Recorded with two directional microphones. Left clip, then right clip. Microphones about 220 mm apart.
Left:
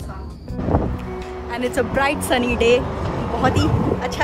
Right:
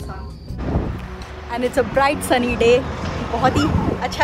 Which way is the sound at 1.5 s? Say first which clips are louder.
Right 3 dB; 5° left (ahead or behind).